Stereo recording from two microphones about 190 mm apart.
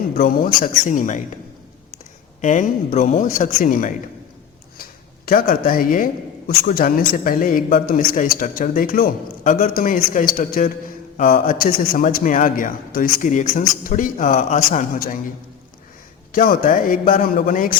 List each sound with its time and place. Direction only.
0.2 s a man's voice: 50° left (ahead or behind)
2.4 s a man's voice: 40° left (ahead or behind)
16.3 s a man's voice: 45° left (ahead or behind)